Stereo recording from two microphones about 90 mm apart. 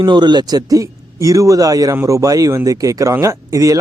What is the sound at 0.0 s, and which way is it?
Speech, 55° right (ahead or behind).